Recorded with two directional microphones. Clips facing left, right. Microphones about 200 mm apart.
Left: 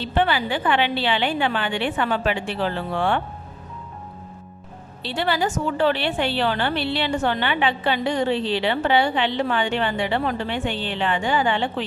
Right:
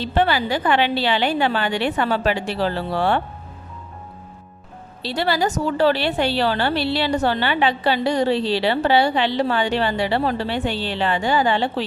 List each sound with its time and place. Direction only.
0.0 s a woman's voice: 40° right (ahead or behind)
5.0 s a woman's voice: 40° right (ahead or behind)